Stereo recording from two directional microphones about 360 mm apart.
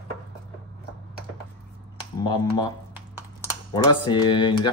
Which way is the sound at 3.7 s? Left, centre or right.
Centre.